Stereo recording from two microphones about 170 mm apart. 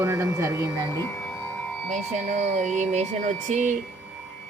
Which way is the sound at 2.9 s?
45° right (ahead or behind).